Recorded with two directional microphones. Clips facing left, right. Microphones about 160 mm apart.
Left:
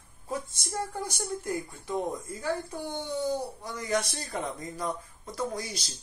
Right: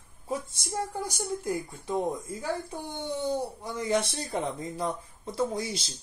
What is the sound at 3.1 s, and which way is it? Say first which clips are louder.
Speech: right 2 dB; 25° right (ahead or behind).